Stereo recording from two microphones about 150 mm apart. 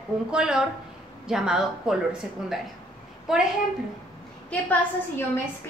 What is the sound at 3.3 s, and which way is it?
Speech, 5° right (ahead or behind).